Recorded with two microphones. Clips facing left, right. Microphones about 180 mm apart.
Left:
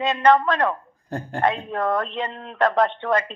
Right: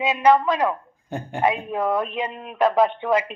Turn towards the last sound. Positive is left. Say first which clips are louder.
# right 1 dB
turn(degrees=-10)  # may be behind; listen again after turning